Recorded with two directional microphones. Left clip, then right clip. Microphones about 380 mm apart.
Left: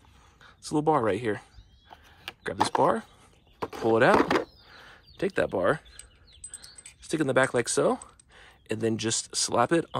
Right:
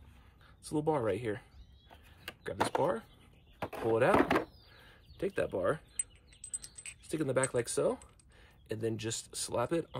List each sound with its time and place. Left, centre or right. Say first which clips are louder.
0.6 s speech: left 8 dB; centre
7.0 s speech: left 8 dB; centre